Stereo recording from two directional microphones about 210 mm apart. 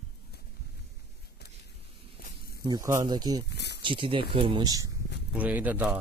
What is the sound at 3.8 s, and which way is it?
Speech, 25° right (ahead or behind).